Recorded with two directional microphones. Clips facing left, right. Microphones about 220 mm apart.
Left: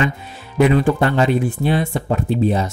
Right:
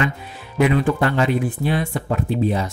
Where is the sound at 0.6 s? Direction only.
30° left (ahead or behind).